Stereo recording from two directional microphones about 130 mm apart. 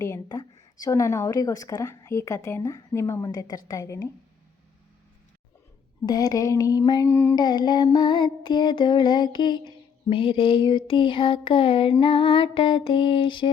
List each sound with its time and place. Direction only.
0.0 s a woman's voice: 25° left (ahead or behind)
6.1 s a woman's voice: 30° left (ahead or behind)
7.1 s music: 20° left (ahead or behind)
7.3 s music: 35° left (ahead or behind)